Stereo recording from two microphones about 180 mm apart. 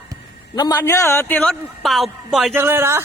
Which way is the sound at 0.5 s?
20° left (ahead or behind).